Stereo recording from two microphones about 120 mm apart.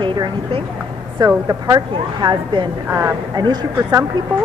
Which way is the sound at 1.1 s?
30° right (ahead or behind).